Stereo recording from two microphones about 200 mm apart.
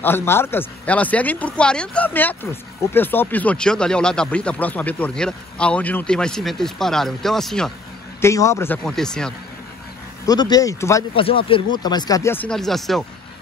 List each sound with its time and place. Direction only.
0.0 s speech: 10° left (ahead or behind)
8.2 s speech: 15° left (ahead or behind)
10.2 s speech: 20° left (ahead or behind)
11.1 s speech: 25° left (ahead or behind); by 13.0 s centre (ahead or behind)